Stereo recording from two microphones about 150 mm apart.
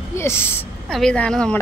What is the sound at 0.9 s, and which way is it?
Speech, 5° left (ahead or behind).